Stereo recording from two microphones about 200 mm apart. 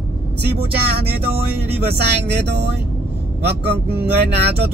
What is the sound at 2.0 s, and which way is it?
Speech, 55° right (ahead or behind).